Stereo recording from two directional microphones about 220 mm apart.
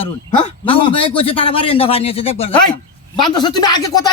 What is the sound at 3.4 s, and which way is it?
Speech, 20° left (ahead or behind).